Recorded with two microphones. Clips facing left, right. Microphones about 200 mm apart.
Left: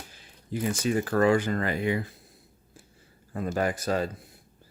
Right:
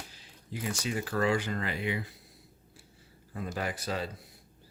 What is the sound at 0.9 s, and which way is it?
Speech, 50° left (ahead or behind).